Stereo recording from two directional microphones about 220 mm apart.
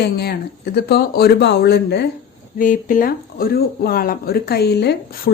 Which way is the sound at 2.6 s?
40° left (ahead or behind).